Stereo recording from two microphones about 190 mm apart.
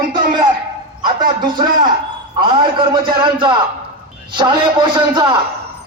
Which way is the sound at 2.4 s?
25° right (ahead or behind).